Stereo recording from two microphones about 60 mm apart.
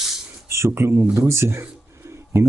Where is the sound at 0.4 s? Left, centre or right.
Right.